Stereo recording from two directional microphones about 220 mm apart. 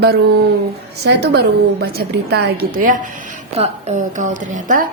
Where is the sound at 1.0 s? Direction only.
50° right (ahead or behind).